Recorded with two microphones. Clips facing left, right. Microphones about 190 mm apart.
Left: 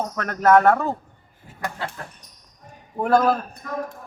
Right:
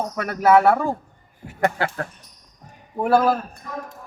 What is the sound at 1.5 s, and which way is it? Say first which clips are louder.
Speech: right 8 dB; 70° right (ahead or behind).